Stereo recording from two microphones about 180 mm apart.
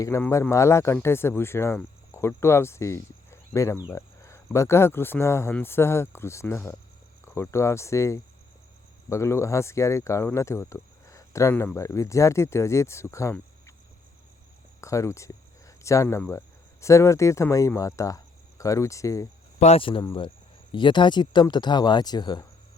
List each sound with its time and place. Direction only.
0.0 s speech: 15° left (ahead or behind)
0.9 s cricket: 15° left (ahead or behind)
3.8 s speech: 15° left (ahead or behind)
14.8 s speech: 15° left (ahead or behind)
19.5 s speech: 35° left (ahead or behind)